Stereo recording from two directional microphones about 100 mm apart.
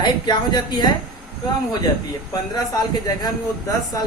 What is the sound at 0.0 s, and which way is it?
Speech, 50° left (ahead or behind).